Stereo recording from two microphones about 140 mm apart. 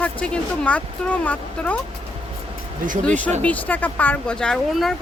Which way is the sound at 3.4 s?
10° left (ahead or behind).